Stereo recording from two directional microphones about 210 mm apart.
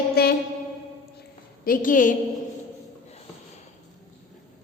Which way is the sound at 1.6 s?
40° left (ahead or behind).